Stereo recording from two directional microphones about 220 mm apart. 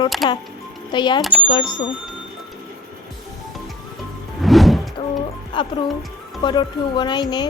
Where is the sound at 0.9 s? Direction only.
20° left (ahead or behind).